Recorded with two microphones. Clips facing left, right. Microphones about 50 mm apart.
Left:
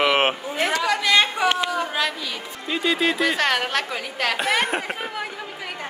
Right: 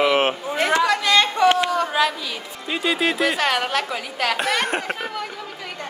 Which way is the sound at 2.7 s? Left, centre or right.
Centre.